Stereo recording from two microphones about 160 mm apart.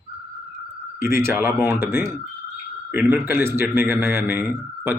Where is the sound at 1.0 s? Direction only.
15° right (ahead or behind).